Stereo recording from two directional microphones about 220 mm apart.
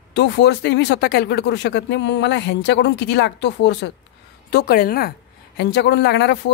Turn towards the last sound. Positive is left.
turn(degrees=50)  # may be behind; listen again after turning